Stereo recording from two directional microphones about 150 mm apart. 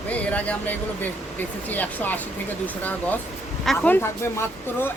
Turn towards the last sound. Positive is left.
turn(degrees=15)  # may be behind; listen again after turning